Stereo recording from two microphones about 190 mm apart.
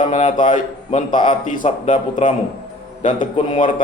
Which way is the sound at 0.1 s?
40° left (ahead or behind).